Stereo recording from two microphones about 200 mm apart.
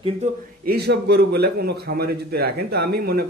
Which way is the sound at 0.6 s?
55° right (ahead or behind).